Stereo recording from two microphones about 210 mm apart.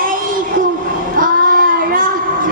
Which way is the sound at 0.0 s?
40° right (ahead or behind).